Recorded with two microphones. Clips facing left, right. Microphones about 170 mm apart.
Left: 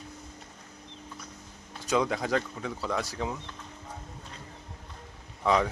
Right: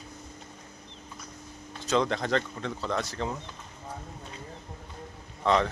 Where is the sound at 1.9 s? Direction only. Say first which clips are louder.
Right 1 dB; 10° left (ahead or behind).